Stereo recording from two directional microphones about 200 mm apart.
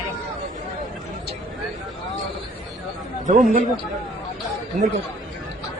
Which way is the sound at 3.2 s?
40° right (ahead or behind).